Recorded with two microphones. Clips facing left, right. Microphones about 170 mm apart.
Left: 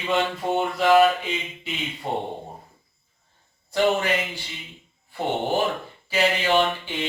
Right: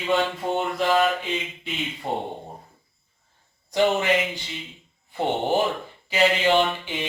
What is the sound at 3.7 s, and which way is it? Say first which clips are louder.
Speech: right 1 dB; 20° right (ahead or behind).